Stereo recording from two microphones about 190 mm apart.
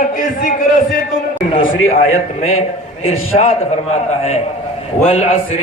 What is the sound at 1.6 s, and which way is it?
Speech, 50° left (ahead or behind).